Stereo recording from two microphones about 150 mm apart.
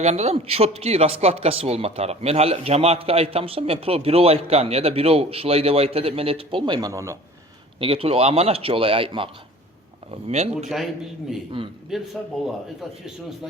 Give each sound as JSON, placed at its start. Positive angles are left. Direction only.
{"t": 0.0, "sound": "speech", "side_deg": -45}
{"t": 7.8, "sound": "speech", "side_deg": -40}
{"t": 11.6, "sound": "speech", "side_deg": -35}
{"t": 11.9, "sound": "a man's voice", "side_deg": 0}